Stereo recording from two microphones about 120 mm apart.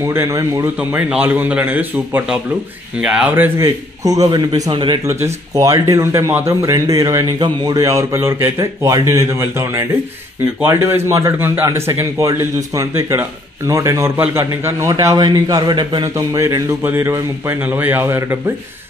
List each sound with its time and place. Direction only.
0.0 s a man's voice: 20° right (ahead or behind)
0.7 s a man's voice: 10° right (ahead or behind); by 4.4 s 30° right (ahead or behind)
4.6 s speech: 40° right (ahead or behind)
5.0 s a man's voice: 25° right (ahead or behind)
16.3 s a man's voice: 25° right (ahead or behind)